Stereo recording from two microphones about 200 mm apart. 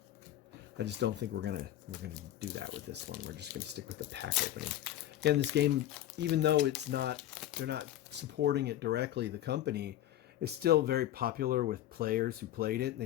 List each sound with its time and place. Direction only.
0.8 s speech: 60° right (ahead or behind)
2.9 s speech: 55° right (ahead or behind)
7.2 s crumpling: centre (ahead or behind)
7.6 s speech: 60° right (ahead or behind)